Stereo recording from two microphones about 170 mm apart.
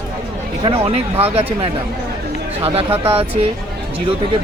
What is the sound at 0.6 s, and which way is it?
Speech, 35° right (ahead or behind).